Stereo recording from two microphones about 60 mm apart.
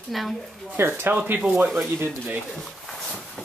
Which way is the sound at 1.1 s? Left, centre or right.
Right.